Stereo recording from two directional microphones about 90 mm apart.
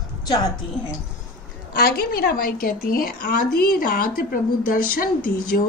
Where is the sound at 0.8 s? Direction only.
15° left (ahead or behind).